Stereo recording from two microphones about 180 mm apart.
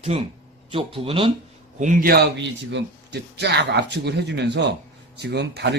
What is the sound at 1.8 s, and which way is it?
A man's voice, 45° right (ahead or behind).